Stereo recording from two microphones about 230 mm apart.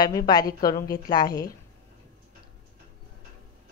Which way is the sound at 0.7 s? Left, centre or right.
Centre.